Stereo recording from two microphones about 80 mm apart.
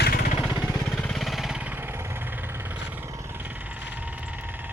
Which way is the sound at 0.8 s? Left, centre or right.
Centre.